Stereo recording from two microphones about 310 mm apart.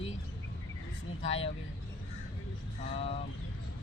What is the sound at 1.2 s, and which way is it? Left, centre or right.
Speech, centre.